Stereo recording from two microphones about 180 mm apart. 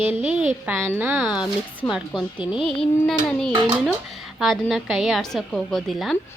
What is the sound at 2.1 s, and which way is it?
Speech, 25° left (ahead or behind).